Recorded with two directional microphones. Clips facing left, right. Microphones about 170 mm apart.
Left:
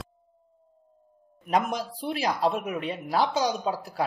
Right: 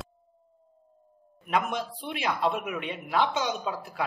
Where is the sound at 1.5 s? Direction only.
40° left (ahead or behind).